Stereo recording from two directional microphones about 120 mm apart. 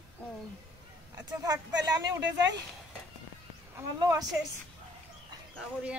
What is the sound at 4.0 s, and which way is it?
Speech, 35° right (ahead or behind).